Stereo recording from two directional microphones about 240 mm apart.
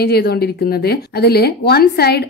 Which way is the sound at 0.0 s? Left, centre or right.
Left.